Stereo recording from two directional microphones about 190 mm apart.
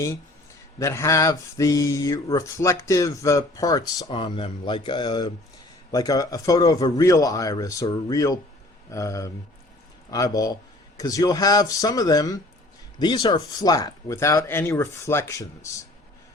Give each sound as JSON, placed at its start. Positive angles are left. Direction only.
{"t": 0.8, "sound": "a man's voice", "side_deg": 15}